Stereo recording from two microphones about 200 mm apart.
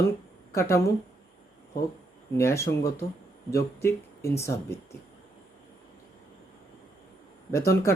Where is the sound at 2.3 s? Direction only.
15° left (ahead or behind).